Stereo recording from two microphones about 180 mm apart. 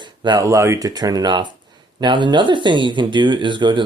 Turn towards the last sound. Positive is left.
turn(degrees=-25)  # may be behind; listen again after turning